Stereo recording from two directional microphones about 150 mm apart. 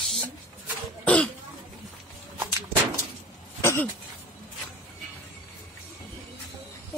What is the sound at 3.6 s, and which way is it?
Throat clearing, 15° left (ahead or behind).